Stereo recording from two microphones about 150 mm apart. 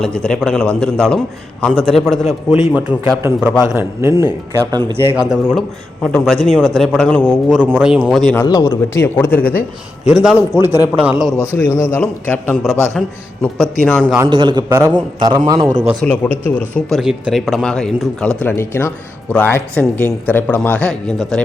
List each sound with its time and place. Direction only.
0.0 s a man's voice: 5° left (ahead or behind); by 4.8 s 20° right (ahead or behind)
5.0 s a man's voice: 5° right (ahead or behind); by 7.3 s 10° left (ahead or behind)
7.3 s a man's voice: 5° right (ahead or behind)
8.4 s a man's voice: 20° left (ahead or behind)
9.4 s a man's voice: 80° left
10.1 s a man's voice: 5° right (ahead or behind)
10.5 s speech: 15° right (ahead or behind)
11.5 s a man's voice: 15° left (ahead or behind)
13.0 s a man's voice: centre (ahead or behind)
14.3 s a man's voice: 30° right (ahead or behind)
16.0 s a man's voice: 10° left (ahead or behind)
17.0 s a man's voice: 5° right (ahead or behind)
18.4 s a man's voice: 15° left (ahead or behind); by 21.4 s centre (ahead or behind)